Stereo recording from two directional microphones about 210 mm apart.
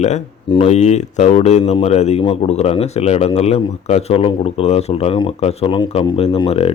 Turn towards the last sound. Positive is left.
turn(degrees=25)  # may be behind; listen again after turning